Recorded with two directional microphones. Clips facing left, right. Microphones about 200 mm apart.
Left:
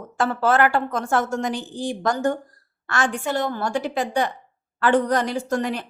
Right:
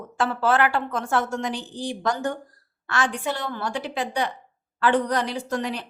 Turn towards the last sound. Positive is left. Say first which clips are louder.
# left 4 dB
turn(degrees=50)  # may be behind; listen again after turning